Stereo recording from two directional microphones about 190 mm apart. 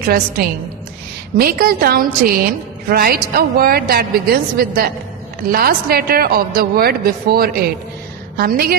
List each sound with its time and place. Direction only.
0.0 s a woman's voice: 50° right (ahead or behind)